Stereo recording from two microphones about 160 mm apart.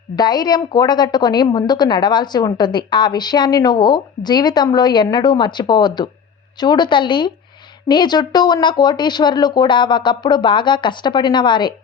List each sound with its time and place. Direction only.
0.2 s a woman's voice: 25° left (ahead or behind)